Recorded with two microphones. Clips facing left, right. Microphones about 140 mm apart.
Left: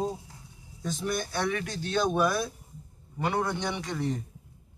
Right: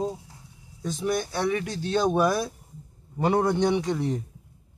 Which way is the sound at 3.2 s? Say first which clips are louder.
Right 7 dB; 40° right (ahead or behind).